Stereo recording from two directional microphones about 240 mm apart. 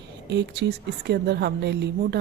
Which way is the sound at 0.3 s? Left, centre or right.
Right.